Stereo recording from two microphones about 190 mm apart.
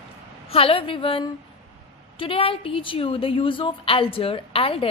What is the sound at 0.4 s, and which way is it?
A woman's voice, 30° left (ahead or behind).